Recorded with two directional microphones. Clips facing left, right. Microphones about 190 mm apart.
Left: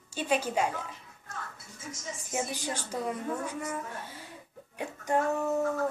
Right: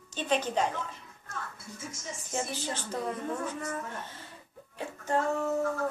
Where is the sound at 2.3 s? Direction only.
15° left (ahead or behind).